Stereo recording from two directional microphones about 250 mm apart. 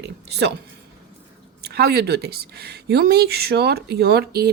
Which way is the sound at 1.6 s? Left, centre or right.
Right.